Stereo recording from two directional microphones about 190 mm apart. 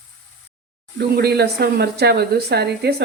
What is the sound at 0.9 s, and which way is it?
Speech, 60° right (ahead or behind).